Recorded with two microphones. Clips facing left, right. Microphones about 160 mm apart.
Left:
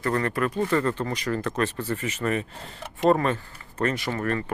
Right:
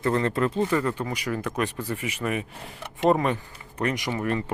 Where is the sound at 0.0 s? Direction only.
20° right (ahead or behind).